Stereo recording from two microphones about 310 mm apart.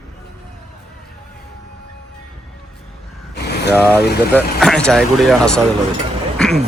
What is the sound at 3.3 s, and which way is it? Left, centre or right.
Mechanisms, left.